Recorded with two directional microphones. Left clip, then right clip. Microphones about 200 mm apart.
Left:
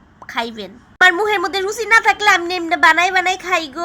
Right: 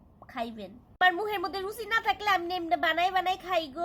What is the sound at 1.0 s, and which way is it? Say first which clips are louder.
A woman's voice: left 13 dB; 15° left (ahead or behind).